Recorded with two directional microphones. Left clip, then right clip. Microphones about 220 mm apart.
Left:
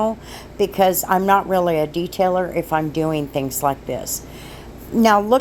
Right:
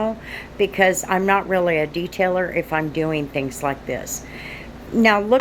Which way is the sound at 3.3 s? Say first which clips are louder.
Left 1 dB; 35° left (ahead or behind).